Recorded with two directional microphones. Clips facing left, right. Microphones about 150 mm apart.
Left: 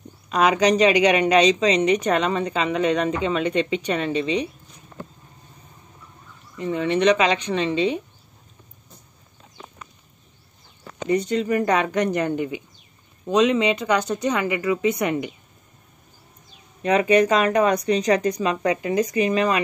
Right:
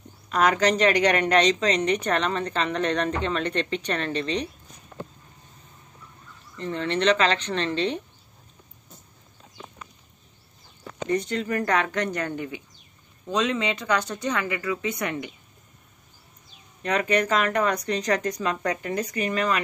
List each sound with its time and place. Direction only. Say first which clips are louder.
0.3 s a woman's voice: left 3 dB; 10° left (ahead or behind)
6.5 s a woman's voice: left 5 dB; 10° left (ahead or behind)
11.1 s a woman's voice: left 5 dB; 15° left (ahead or behind)
16.8 s a woman's voice: left 6 dB; 15° left (ahead or behind)